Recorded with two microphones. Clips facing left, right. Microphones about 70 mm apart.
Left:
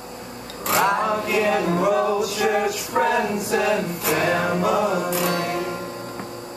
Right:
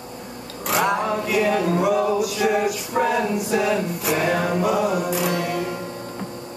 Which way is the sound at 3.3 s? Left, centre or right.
Centre.